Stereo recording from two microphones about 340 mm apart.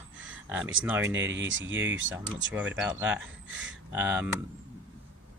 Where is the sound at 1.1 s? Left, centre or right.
Right.